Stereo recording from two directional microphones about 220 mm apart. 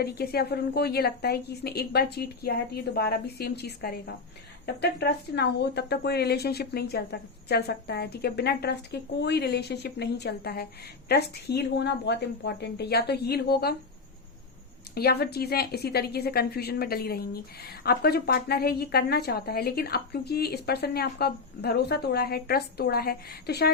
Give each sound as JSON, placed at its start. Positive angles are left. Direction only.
{"t": 0.0, "sound": "speech", "side_deg": 45}
{"t": 14.9, "sound": "speech", "side_deg": 45}